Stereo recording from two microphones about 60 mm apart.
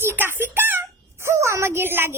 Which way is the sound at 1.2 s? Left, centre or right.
Right.